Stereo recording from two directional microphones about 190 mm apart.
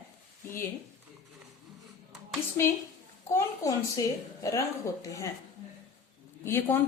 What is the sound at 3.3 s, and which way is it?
A woman's voice, 15° left (ahead or behind).